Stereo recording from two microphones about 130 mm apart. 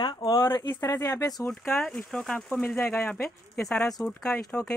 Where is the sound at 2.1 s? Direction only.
5° left (ahead or behind).